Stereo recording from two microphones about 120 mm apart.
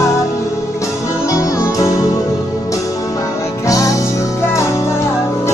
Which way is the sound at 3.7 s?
25° left (ahead or behind).